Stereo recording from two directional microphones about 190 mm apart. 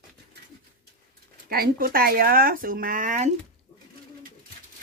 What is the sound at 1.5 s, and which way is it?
Speech, 50° right (ahead or behind).